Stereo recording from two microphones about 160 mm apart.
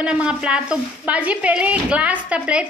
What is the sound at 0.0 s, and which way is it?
Speech, 5° right (ahead or behind).